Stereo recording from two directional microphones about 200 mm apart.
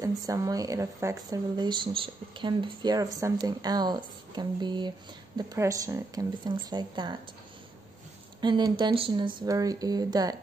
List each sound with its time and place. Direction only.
0.0 s speech: 15° right (ahead or behind)
8.4 s speech: 20° right (ahead or behind)